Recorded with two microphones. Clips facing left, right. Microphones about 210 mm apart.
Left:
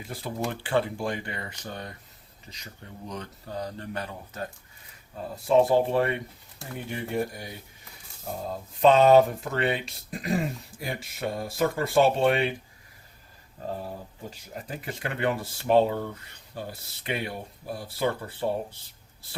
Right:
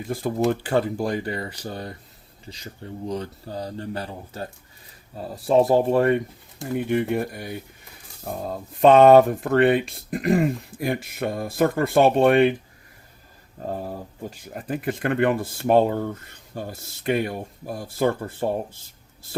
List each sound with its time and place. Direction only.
0.1 s speech: 45° right (ahead or behind)
6.7 s speech: 60° right (ahead or behind)
8.8 s speech: 55° right (ahead or behind)
14.5 s speech: 55° right (ahead or behind)